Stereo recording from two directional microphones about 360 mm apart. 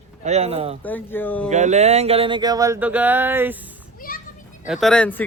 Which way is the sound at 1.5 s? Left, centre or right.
Centre.